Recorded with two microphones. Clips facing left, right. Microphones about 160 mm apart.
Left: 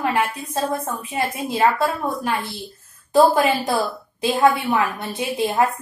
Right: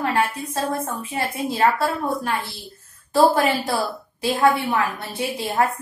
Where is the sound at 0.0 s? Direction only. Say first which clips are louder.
Even; 20° left (ahead or behind).